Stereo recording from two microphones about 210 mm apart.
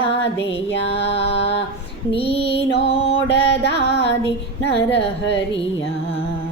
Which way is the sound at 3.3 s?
55° left (ahead or behind).